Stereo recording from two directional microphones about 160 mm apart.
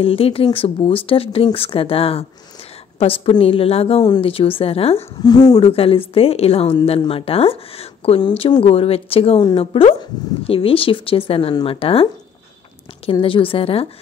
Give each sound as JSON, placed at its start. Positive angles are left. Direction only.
{"t": 0.0, "sound": "a woman's voice", "side_deg": 35}
{"t": 5.2, "sound": "speech", "side_deg": 25}
{"t": 5.7, "sound": "a woman's voice", "side_deg": 35}